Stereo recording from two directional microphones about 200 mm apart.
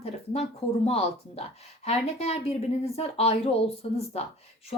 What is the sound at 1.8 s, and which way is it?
A woman's voice, 35° left (ahead or behind).